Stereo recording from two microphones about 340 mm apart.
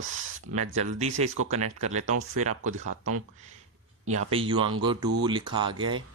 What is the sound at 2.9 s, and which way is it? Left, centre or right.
Speech, right.